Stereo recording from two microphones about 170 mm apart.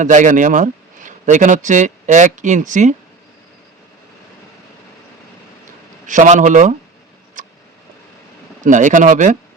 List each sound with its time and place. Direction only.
0.0 s speech: 50° right (ahead or behind)
6.1 s speech: 45° right (ahead or behind)
7.4 s vehicle: 50° right (ahead or behind)
8.6 s speech: 50° right (ahead or behind)